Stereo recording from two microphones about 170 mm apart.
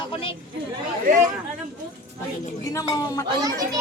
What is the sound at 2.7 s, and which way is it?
Speech, 20° left (ahead or behind).